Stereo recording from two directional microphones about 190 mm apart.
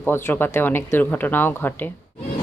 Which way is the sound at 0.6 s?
10° left (ahead or behind).